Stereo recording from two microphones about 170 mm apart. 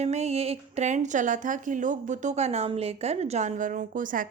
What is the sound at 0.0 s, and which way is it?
A woman's voice, 40° right (ahead or behind).